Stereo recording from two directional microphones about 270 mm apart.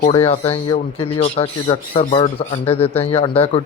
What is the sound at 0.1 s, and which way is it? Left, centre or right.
Speech, left.